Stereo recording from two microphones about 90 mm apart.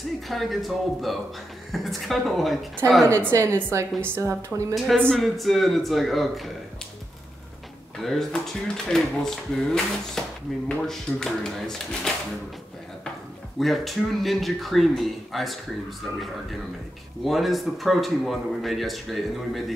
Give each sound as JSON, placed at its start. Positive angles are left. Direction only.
{"t": 0.3, "sound": "speech", "side_deg": 0}
{"t": 2.8, "sound": "a woman's voice", "side_deg": -35}
{"t": 4.7, "sound": "speech", "side_deg": 0}
{"t": 8.0, "sound": "speech", "side_deg": 5}
{"t": 13.6, "sound": "speech", "side_deg": 0}
{"t": 17.2, "sound": "speech", "side_deg": 0}